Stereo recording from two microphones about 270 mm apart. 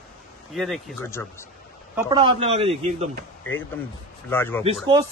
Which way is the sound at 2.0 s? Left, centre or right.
Centre.